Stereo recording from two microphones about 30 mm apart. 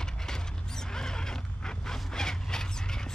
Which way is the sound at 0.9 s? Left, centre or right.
Left.